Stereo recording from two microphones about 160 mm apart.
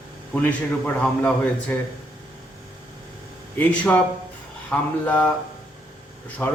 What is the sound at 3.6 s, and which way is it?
A man's voice, 10° left (ahead or behind).